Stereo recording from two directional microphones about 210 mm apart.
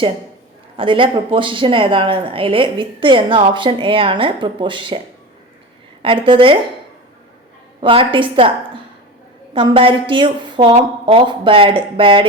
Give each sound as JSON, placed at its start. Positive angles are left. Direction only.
{"t": 0.8, "sound": "speech", "side_deg": -25}
{"t": 6.0, "sound": "speech", "side_deg": -25}
{"t": 7.8, "sound": "speech", "side_deg": -25}